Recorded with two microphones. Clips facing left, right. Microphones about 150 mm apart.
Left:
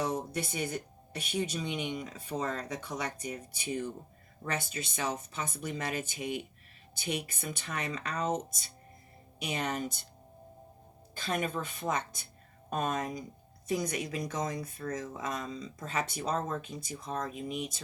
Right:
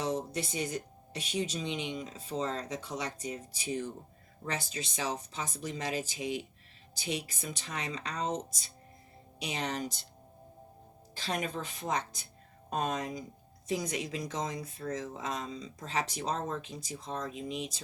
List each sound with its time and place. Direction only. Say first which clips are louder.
0.0 s music: even; 55° left (ahead or behind)
0.5 s speech: even; 60° left (ahead or behind)
11.1 s speech: left 2 dB; 55° left (ahead or behind)